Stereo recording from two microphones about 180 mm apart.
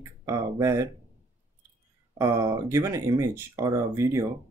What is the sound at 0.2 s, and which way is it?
Speech, 15° right (ahead or behind).